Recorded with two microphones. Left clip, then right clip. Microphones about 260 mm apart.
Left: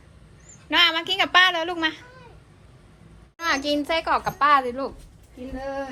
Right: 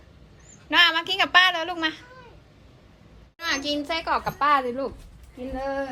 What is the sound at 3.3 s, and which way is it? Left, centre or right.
A child's voice, centre.